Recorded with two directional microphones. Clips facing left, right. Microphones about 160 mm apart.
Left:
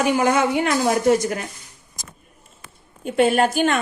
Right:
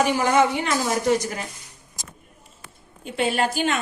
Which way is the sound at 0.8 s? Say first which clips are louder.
Left 4 dB; 50° left (ahead or behind).